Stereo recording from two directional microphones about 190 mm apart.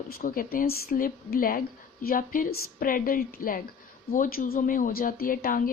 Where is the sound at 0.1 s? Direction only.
50° left (ahead or behind).